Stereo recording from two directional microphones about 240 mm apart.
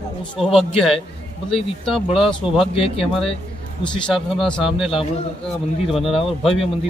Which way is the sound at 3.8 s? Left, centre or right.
Centre.